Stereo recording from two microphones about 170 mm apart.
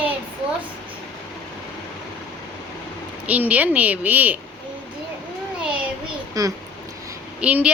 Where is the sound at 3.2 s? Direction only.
10° right (ahead or behind).